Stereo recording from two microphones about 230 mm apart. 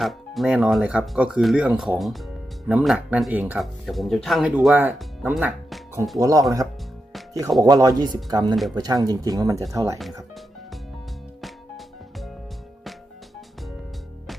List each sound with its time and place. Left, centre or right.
0.0 s speech: centre
7.6 s speech: centre